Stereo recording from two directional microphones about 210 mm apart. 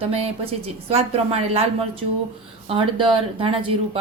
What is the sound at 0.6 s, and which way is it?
Speech, 30° right (ahead or behind).